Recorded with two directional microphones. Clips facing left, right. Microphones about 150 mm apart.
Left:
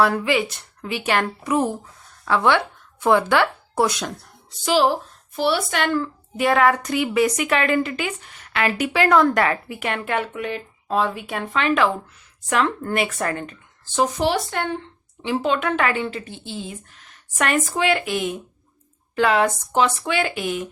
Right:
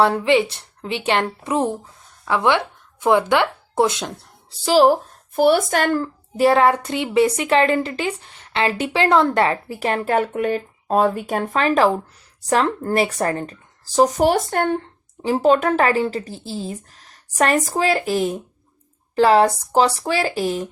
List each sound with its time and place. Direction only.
0.0 s a woman's voice: 25° right (ahead or behind)
2.2 s speech: 15° right (ahead or behind)
4.6 s speech: 40° right (ahead or behind)